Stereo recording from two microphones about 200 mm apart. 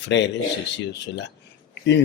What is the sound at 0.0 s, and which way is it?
Speech, 60° left (ahead or behind).